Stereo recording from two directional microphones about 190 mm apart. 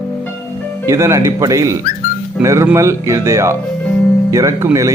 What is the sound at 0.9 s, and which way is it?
Speech, 15° right (ahead or behind).